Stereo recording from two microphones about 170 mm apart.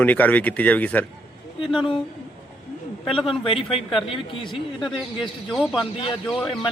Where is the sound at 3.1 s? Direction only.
30° left (ahead or behind).